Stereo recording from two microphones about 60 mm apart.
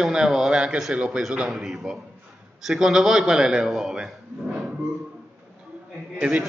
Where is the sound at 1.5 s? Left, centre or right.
Centre.